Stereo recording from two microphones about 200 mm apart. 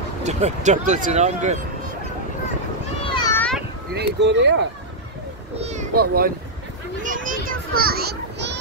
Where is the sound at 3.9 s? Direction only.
60° right (ahead or behind).